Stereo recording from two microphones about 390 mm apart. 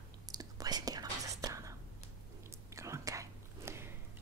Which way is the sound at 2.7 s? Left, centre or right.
Centre.